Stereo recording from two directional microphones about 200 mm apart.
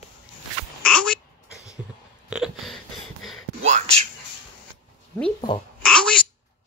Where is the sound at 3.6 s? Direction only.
35° right (ahead or behind).